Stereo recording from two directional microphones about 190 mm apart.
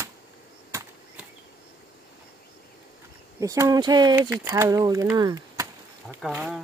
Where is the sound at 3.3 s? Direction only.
15° right (ahead or behind).